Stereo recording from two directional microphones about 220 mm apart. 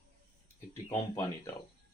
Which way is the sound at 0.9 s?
10° left (ahead or behind).